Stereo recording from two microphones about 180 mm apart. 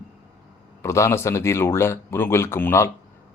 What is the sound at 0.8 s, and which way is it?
Speech, 15° left (ahead or behind).